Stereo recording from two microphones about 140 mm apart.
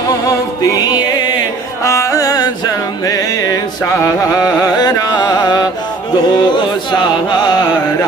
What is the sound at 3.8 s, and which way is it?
Mantra, 25° left (ahead or behind).